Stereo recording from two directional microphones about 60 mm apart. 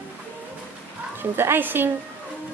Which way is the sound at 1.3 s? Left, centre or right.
Right.